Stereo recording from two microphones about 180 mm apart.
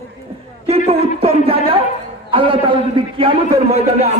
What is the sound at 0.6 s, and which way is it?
A man's voice, 35° right (ahead or behind).